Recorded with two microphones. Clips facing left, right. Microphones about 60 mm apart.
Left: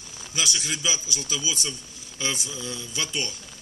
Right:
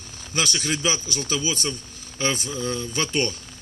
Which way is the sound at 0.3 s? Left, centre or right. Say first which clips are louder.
Right 4 dB; right.